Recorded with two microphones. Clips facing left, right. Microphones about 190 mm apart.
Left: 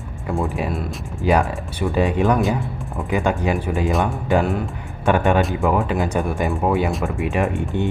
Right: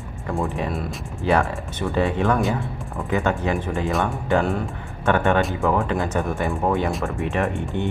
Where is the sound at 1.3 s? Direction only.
15° left (ahead or behind).